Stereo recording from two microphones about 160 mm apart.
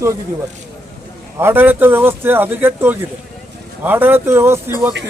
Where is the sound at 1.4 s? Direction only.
15° right (ahead or behind).